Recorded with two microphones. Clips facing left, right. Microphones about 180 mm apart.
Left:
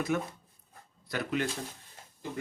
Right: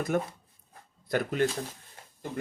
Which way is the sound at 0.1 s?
45° right (ahead or behind).